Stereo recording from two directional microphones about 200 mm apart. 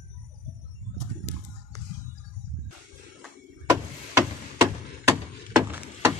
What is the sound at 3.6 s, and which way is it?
Chop, 15° right (ahead or behind).